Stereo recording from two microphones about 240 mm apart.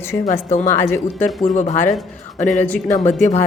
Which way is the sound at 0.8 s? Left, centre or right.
Centre.